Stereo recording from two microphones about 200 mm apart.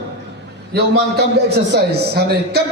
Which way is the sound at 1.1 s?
55° right (ahead or behind).